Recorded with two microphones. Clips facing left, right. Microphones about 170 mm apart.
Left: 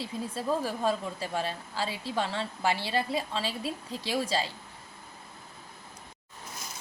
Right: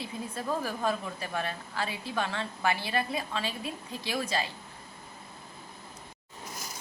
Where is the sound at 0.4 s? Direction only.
30° left (ahead or behind).